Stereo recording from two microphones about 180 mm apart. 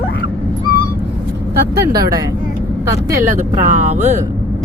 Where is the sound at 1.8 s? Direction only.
20° right (ahead or behind).